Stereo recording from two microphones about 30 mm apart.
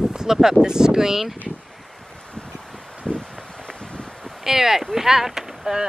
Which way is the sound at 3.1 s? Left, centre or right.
Centre.